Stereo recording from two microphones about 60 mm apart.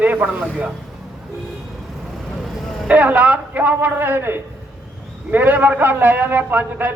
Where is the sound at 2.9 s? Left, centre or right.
Right.